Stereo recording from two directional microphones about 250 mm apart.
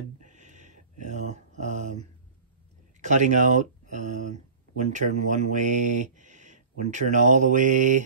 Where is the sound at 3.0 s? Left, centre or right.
Right.